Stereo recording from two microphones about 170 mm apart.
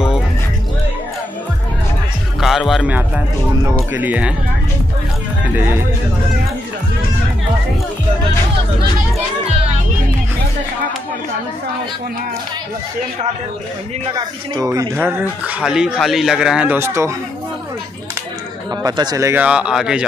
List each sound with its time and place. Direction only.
2.4 s speech: centre (ahead or behind)
14.1 s speech: 20° right (ahead or behind)
18.8 s speech: 20° right (ahead or behind)
19.4 s speech: 5° right (ahead or behind)